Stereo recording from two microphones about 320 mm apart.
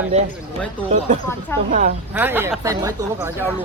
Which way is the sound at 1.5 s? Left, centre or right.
Centre.